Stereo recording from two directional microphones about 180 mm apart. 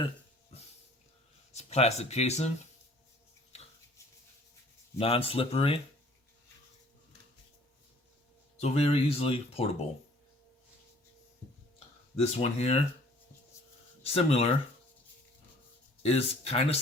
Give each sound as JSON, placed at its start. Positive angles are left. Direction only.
{"t": 1.5, "sound": "speech", "side_deg": 35}
{"t": 3.5, "sound": "a sound", "side_deg": 35}
{"t": 4.9, "sound": "speech", "side_deg": 30}
{"t": 8.5, "sound": "speech", "side_deg": 35}
{"t": 12.1, "sound": "speech", "side_deg": 35}
{"t": 14.0, "sound": "speech", "side_deg": 35}
{"t": 16.0, "sound": "speech", "side_deg": 35}